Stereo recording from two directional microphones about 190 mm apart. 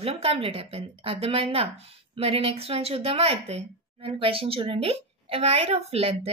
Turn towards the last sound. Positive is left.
turn(degrees=-30)  # may be behind; listen again after turning